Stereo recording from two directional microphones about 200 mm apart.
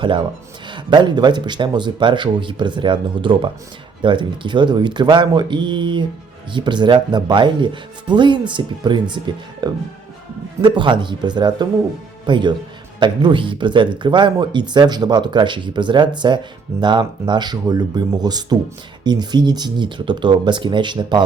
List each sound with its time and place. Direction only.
0.7 s speech: 20° right (ahead or behind)